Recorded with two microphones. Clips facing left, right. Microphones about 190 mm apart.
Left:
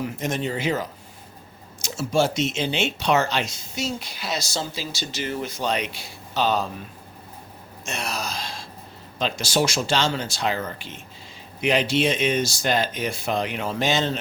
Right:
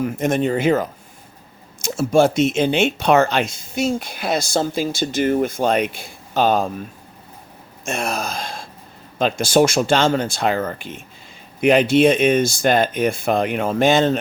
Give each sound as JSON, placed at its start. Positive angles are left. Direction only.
{"t": 0.0, "sound": "speech", "side_deg": -55}
{"t": 7.9, "sound": "speech", "side_deg": -50}